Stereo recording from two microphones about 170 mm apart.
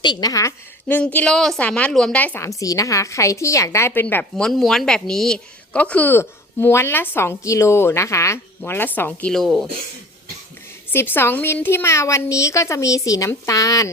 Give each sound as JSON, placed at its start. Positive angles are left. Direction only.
{"t": 0.0, "sound": "a woman's voice", "side_deg": 25}
{"t": 10.9, "sound": "a woman's voice", "side_deg": 15}